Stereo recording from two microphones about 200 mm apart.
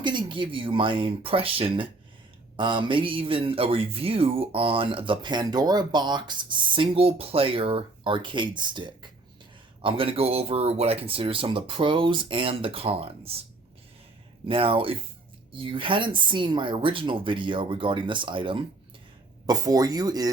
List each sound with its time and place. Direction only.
0.0 s speech: 25° right (ahead or behind)
14.4 s speech: 25° right (ahead or behind)